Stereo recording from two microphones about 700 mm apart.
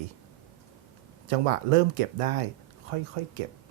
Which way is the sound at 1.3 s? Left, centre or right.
Right.